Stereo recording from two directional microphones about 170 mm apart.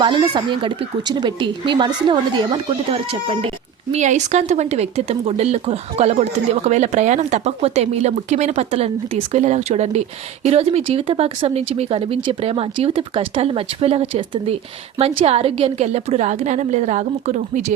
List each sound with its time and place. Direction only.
0.0 s speech: 30° right (ahead or behind)
3.9 s speech: 45° right (ahead or behind)